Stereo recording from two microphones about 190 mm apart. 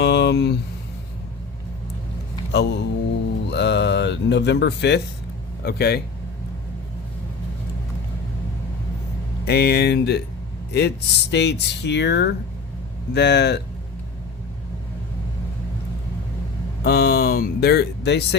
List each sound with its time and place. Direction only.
0.0 s a sound: 65° left (ahead or behind)
2.5 s speech: 65° left (ahead or behind)
9.5 s speech: 55° left (ahead or behind)
16.8 s speech: 55° left (ahead or behind)